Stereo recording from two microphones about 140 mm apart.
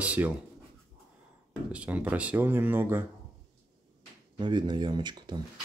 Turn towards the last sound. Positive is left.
turn(degrees=-30)  # may be behind; listen again after turning